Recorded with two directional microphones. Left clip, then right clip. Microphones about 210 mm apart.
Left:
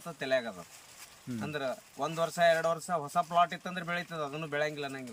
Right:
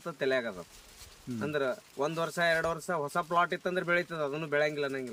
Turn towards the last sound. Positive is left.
turn(degrees=-15)  # may be behind; listen again after turning